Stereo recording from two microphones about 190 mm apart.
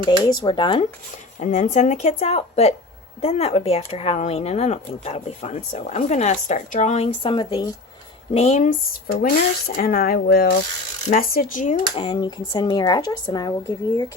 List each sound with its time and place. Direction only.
0.0 s speech: 25° left (ahead or behind)
1.4 s speech: 40° left (ahead or behind)
11.9 s speech: 25° left (ahead or behind)